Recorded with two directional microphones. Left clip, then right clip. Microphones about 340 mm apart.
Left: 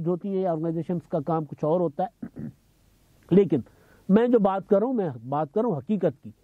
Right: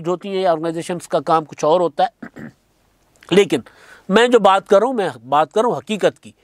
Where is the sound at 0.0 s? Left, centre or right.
Centre.